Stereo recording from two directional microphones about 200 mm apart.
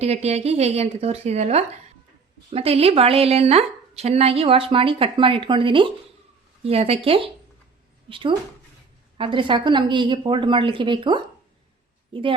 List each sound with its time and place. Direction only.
0.0 s a woman's voice: 30° right (ahead or behind)